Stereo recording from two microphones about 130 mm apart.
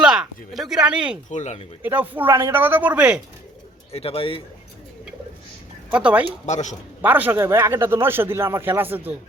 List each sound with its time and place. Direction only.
0.0 s speech: 5° right (ahead or behind)
1.3 s a man's voice: 65° left (ahead or behind)
1.8 s a man's voice: 15° right (ahead or behind)
3.9 s a man's voice: 45° left (ahead or behind)
5.9 s a man's voice: 10° right (ahead or behind)
6.4 s a man's voice: 65° left (ahead or behind)
7.0 s a man's voice: 15° right (ahead or behind)